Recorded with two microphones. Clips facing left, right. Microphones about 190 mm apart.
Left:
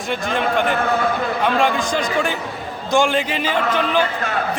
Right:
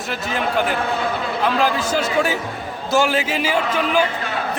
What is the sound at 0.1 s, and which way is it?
A man's voice, 5° right (ahead or behind).